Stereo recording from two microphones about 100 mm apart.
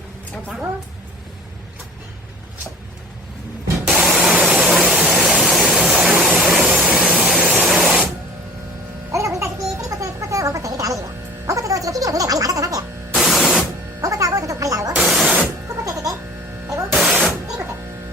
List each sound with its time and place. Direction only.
3.8 s spray: centre (ahead or behind)
4.4 s a sound: 10° right (ahead or behind)
7.6 s spray: 5° right (ahead or behind)
9.1 s a sound: 30° right (ahead or behind)
11.4 s music: 35° right (ahead or behind)
13.1 s static: centre (ahead or behind)
14.0 s music: 35° right (ahead or behind)
14.9 s spray: 5° right (ahead or behind)
15.8 s music: 35° right (ahead or behind)
16.9 s music: 5° right (ahead or behind)